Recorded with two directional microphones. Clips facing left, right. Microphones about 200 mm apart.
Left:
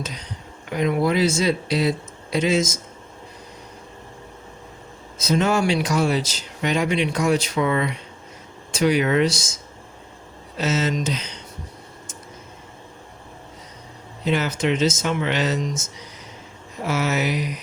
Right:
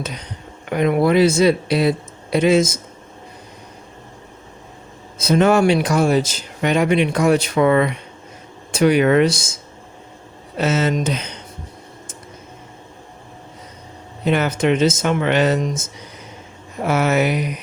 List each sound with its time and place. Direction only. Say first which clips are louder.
0.0 s a sound: right 4 dB; 60° right (ahead or behind)
0.7 s speech: right 5 dB; 60° right (ahead or behind)
5.2 s speech: right 6 dB; 60° right (ahead or behind)
10.6 s speech: right 4 dB; 55° right (ahead or behind)
14.3 s speech: right 4 dB; 55° right (ahead or behind)